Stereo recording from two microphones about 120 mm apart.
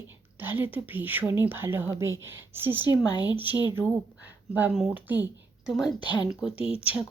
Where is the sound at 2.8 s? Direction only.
35° left (ahead or behind).